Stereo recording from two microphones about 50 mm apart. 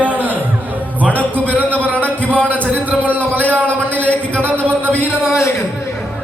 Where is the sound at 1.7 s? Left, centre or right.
Right.